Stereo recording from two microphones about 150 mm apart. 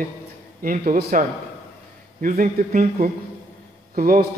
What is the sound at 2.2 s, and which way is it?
Speech, 65° right (ahead or behind).